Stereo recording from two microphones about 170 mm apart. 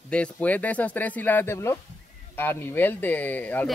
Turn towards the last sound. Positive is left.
turn(degrees=10)  # may be behind; listen again after turning